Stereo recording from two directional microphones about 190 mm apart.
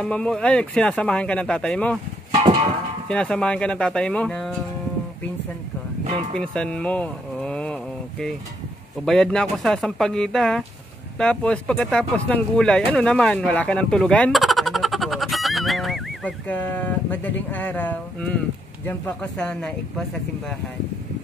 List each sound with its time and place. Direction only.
0.0 s speech: 5° left (ahead or behind)
3.1 s speech: 5° left (ahead or behind)
6.3 s speech: 5° left (ahead or behind)